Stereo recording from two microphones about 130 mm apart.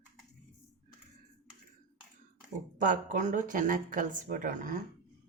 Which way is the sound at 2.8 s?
80° right.